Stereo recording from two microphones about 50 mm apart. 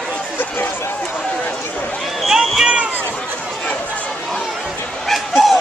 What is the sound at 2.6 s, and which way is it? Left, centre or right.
Run, centre.